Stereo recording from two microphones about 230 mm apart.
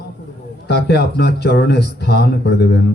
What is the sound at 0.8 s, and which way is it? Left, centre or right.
A man's voice, left.